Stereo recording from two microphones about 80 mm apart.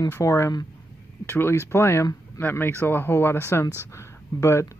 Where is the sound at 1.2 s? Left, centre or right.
Left.